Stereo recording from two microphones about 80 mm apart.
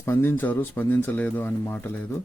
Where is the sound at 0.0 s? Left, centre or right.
Left.